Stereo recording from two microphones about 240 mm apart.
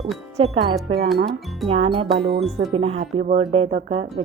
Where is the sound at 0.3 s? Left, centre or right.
Right.